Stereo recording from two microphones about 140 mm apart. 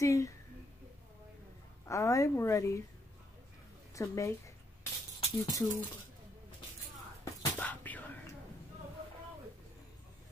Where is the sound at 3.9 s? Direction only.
20° left (ahead or behind).